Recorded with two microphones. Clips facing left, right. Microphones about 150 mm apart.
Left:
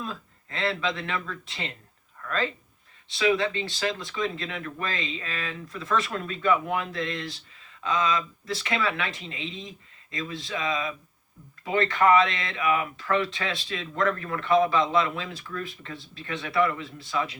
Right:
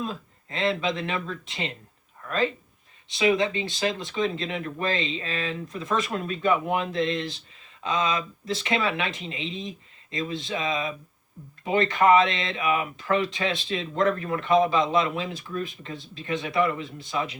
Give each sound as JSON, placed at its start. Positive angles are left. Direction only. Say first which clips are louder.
{"t": 0.0, "sound": "speech", "louder": "right 4 dB", "side_deg": -20}